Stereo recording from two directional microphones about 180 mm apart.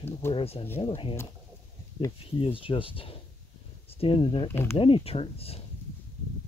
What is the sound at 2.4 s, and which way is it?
Speech, 30° left (ahead or behind).